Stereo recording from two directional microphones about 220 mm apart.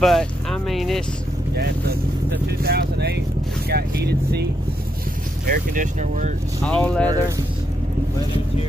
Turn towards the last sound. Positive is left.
turn(degrees=5)  # may be behind; listen again after turning